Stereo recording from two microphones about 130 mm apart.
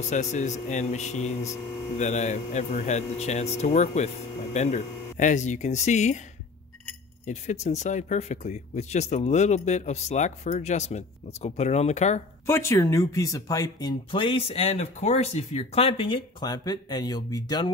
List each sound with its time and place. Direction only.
0.1 s speech: 65° left (ahead or behind)
7.2 s speech: 60° left (ahead or behind)
12.4 s speech: 20° left (ahead or behind)